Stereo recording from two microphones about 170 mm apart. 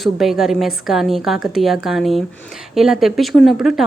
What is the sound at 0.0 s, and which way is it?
A woman's voice, centre (ahead or behind).